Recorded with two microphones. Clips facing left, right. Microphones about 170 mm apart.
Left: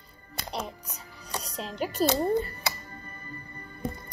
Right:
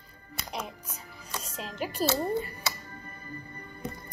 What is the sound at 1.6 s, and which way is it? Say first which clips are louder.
Speech: left 3 dB; 5° right (ahead or behind).